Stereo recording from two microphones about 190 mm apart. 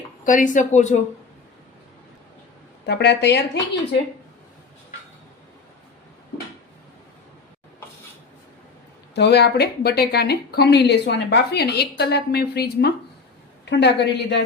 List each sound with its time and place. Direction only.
0.3 s speech: 45° left (ahead or behind)
2.8 s a woman's voice: 65° left (ahead or behind)
9.1 s a woman's voice: 60° left (ahead or behind)